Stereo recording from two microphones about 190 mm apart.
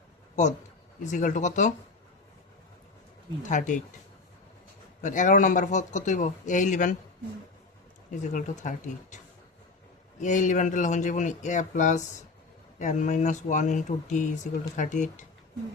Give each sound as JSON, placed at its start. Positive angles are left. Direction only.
{"t": 1.0, "sound": "speech", "side_deg": 40}
{"t": 3.4, "sound": "speech", "side_deg": 40}
{"t": 5.0, "sound": "speech", "side_deg": 40}
{"t": 8.1, "sound": "speech", "side_deg": 40}